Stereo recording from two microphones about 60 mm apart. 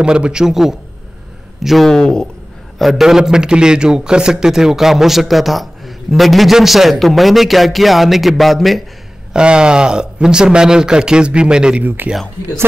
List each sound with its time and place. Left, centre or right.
0.0 s speech: centre
1.9 s a man's voice: centre
2.8 s a man's voice: centre
9.3 s speech: centre